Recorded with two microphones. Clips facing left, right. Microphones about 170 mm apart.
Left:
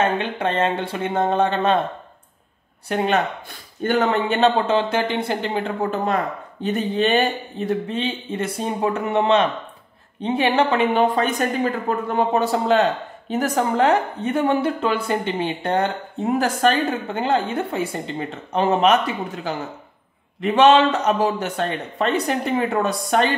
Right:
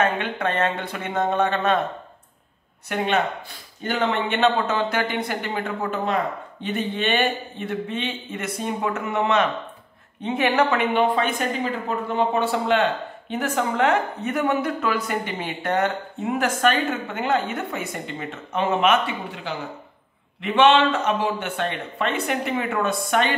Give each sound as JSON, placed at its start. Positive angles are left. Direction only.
{"t": 0.0, "sound": "speech", "side_deg": 30}
{"t": 3.8, "sound": "a woman's voice", "side_deg": 50}